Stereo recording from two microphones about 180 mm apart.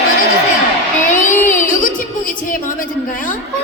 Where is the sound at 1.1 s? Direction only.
45° left (ahead or behind).